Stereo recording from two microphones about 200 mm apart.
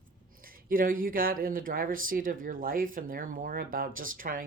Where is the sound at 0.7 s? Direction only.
45° right (ahead or behind).